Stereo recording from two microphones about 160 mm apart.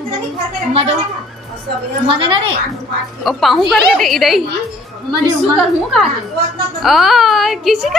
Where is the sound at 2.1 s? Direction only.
35° right (ahead or behind).